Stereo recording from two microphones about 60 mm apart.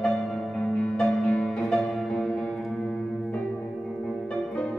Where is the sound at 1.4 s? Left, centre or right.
Centre.